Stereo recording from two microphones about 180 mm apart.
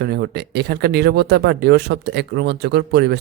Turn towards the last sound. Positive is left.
turn(degrees=-65)  # may be behind; listen again after turning